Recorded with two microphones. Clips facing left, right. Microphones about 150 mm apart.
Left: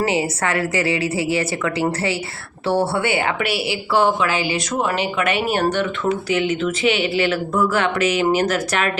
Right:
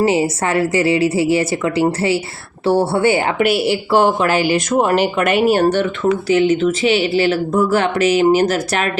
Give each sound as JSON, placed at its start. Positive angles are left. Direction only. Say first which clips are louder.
{"t": 0.0, "sound": "speech", "louder": "right 5 dB", "side_deg": -30}